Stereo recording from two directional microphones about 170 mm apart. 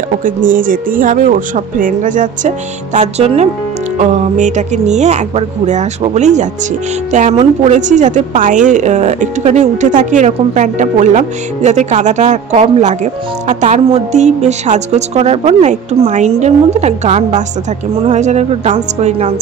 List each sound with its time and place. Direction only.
0.6 s a woman's voice: 55° right (ahead or behind)